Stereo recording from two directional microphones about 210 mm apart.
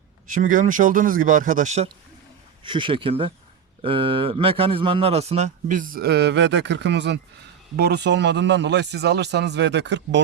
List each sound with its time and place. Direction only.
0.3 s a man's voice: 40° right (ahead or behind)
2.6 s a man's voice: 25° right (ahead or behind); by 10.2 s 55° right (ahead or behind)